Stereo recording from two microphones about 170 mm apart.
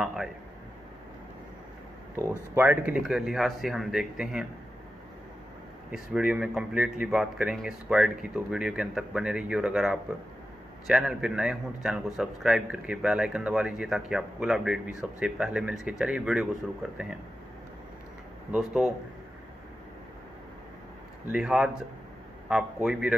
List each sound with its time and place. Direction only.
0.0 s speech: 5° right (ahead or behind)
2.5 s speech: 10° right (ahead or behind)
5.9 s speech: 5° right (ahead or behind)
18.5 s speech: 5° right (ahead or behind)
21.3 s speech: 5° right (ahead or behind)